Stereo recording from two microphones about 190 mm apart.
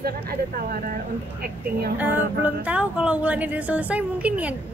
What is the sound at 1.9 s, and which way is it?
Speech, 10° right (ahead or behind).